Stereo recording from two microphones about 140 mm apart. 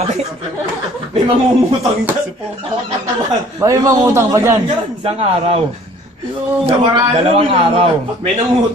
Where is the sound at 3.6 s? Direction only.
25° right (ahead or behind).